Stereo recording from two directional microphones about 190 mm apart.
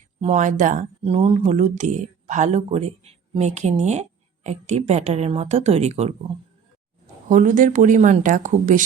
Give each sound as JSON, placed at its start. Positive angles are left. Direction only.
{"t": 0.2, "sound": "speech", "side_deg": -35}
{"t": 7.3, "sound": "speech", "side_deg": -40}